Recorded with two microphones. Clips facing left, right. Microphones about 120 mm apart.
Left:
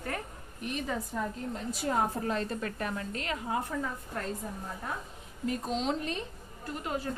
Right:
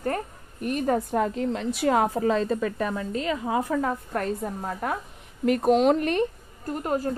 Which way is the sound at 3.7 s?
80° right.